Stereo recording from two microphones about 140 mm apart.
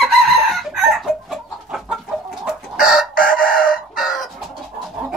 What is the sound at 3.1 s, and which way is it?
Chicken, 90° left.